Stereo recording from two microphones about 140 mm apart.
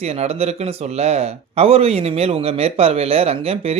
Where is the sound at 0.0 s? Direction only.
50° right (ahead or behind).